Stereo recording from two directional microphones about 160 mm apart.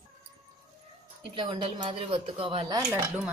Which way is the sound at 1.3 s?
30° right (ahead or behind).